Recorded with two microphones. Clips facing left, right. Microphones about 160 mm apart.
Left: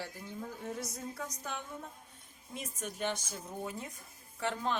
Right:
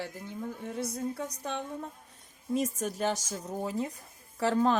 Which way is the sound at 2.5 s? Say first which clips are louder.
Right 12 dB; 40° right (ahead or behind).